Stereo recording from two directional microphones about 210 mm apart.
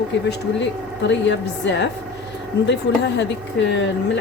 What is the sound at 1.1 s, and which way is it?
Speech, 60° left (ahead or behind).